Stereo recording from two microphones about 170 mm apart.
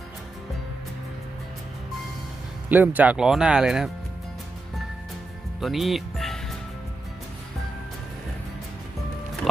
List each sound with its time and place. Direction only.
2.6 s speech: 10° right (ahead or behind)
5.5 s music: centre (ahead or behind)